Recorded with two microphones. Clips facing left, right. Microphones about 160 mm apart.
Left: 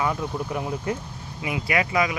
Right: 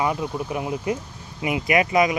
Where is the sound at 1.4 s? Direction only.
20° right (ahead or behind).